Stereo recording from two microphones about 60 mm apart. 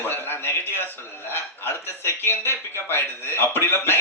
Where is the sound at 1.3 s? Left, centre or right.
Left.